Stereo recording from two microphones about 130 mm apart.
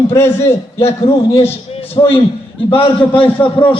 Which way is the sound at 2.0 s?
35° left (ahead or behind).